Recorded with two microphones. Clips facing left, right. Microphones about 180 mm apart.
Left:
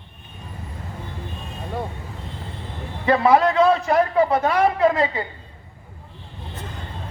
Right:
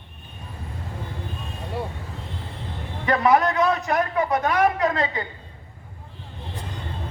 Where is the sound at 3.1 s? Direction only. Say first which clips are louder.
Left 3 dB; 30° left (ahead or behind).